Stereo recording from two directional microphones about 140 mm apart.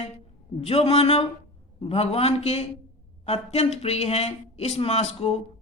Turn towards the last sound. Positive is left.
turn(degrees=45)  # may be behind; listen again after turning